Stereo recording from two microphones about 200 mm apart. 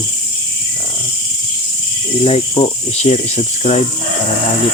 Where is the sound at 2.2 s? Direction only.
30° left (ahead or behind).